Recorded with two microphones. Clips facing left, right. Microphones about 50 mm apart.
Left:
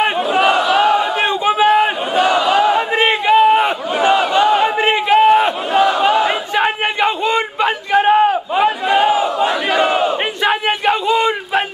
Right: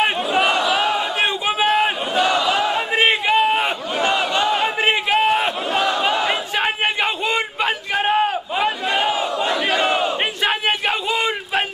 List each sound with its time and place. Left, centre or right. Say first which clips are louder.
0.0 s crowd: left 4 dB; centre
1.4 s a sound: left 6 dB; centre
1.7 s crowd: left 5 dB; centre
3.3 s battle cry: left 6 dB; centre
4.2 s crowd: left 6 dB; centre
5.2 s battle cry: left 7 dB; centre
7.6 s a sound: left 8 dB; centre
8.9 s battle cry: left 6 dB; centre
11.1 s a sound: left 7 dB; centre